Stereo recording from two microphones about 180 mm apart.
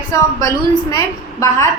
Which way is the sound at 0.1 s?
20° left (ahead or behind).